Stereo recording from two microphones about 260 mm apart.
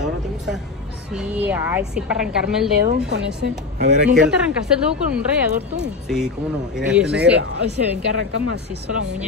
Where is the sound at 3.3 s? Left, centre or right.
Right.